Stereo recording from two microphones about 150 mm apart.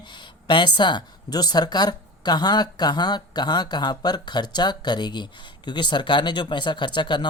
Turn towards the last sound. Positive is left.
turn(degrees=30)  # may be behind; listen again after turning